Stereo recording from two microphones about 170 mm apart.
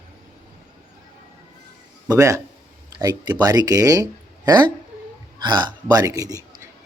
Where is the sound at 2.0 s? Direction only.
15° right (ahead or behind).